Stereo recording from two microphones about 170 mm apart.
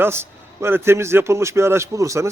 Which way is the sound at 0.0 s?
15° right (ahead or behind).